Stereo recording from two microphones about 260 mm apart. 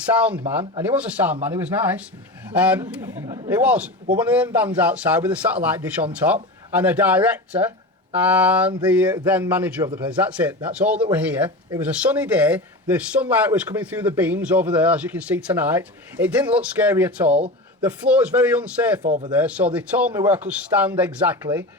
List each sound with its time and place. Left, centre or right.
0.2 s speech: centre
3.5 s speech: centre
19.0 s speech: right
19.4 s speech: centre